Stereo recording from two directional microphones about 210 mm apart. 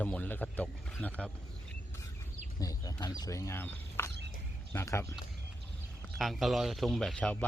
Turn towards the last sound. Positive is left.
turn(degrees=5)  # may be behind; listen again after turning